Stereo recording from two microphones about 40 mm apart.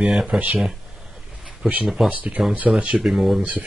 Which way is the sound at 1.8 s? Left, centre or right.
Centre.